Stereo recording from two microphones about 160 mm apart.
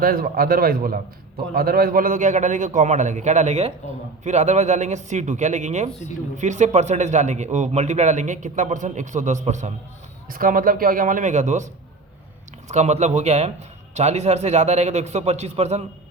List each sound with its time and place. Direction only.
0.0 s a man's voice: 65° right (ahead or behind); by 9.7 s 45° right (ahead or behind)
10.2 s a man's voice: 60° right (ahead or behind); by 15.8 s 40° right (ahead or behind)